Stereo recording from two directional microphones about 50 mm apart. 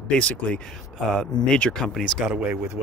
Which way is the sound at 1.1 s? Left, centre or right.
Centre.